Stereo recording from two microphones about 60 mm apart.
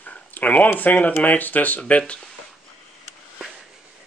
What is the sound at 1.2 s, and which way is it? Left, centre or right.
Speech, left.